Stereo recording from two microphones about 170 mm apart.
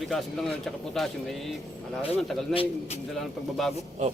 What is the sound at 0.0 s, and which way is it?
A man's voice, centre (ahead or behind).